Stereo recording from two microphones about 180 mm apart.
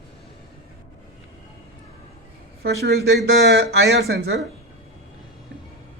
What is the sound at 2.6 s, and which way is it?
Speech, 60° right (ahead or behind).